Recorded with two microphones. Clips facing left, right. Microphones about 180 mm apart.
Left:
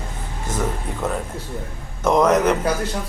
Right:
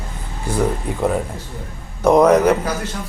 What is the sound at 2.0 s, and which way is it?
Speech, 10° right (ahead or behind).